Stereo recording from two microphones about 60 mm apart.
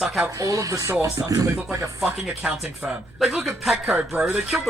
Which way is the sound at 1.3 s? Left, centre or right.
Right.